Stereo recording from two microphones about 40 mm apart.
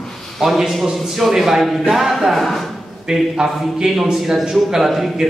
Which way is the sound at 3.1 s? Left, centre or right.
Centre.